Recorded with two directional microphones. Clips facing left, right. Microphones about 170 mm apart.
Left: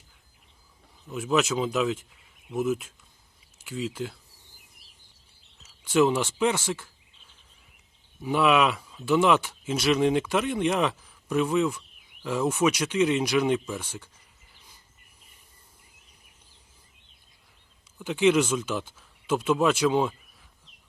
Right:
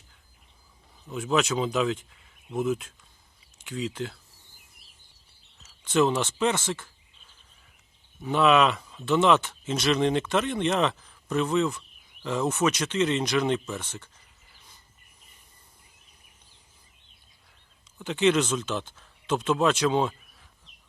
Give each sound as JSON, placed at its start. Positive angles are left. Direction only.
{"t": 1.1, "sound": "speech", "side_deg": 5}
{"t": 5.6, "sound": "speech", "side_deg": 10}
{"t": 8.2, "sound": "speech", "side_deg": 10}
{"t": 17.9, "sound": "speech", "side_deg": 5}